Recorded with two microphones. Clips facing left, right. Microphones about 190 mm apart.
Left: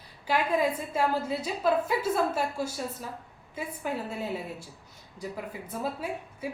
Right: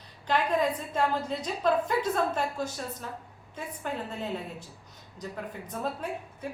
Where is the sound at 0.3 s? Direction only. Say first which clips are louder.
Even; 10° left (ahead or behind).